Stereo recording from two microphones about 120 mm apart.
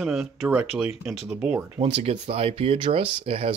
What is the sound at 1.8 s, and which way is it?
Speech, 60° right (ahead or behind).